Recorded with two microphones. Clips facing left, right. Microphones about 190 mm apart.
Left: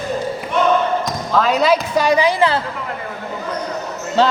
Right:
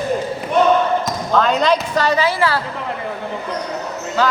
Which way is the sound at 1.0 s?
Centre (ahead or behind).